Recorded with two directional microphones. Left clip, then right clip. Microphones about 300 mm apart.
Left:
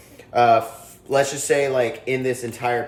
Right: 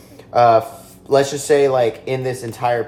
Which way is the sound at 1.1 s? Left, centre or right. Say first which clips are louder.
Right 4 dB; centre.